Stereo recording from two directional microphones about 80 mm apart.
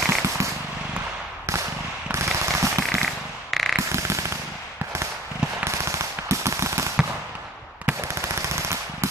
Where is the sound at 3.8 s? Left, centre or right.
Right.